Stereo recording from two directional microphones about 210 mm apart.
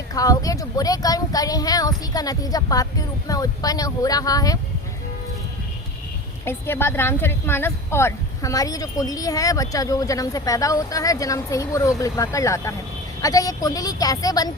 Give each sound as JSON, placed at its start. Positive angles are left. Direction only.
{"t": 0.1, "sound": "speech", "side_deg": 15}
{"t": 6.4, "sound": "speech", "side_deg": 10}